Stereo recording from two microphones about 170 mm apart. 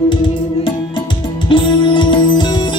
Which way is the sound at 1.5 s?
30° left (ahead or behind).